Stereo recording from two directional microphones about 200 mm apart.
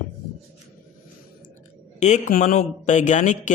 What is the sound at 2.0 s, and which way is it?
A man's voice, 40° left (ahead or behind).